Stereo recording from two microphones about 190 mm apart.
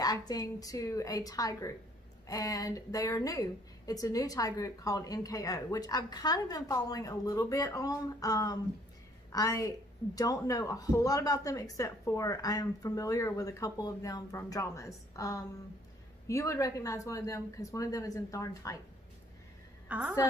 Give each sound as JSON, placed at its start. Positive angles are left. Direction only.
{"t": 0.0, "sound": "a woman's voice", "side_deg": 20}
{"t": 19.9, "sound": "a woman's voice", "side_deg": -10}